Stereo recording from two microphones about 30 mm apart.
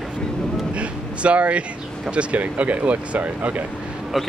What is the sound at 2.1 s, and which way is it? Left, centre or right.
Speech, right.